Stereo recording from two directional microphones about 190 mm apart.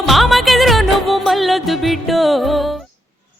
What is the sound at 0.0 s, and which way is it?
Music, centre (ahead or behind).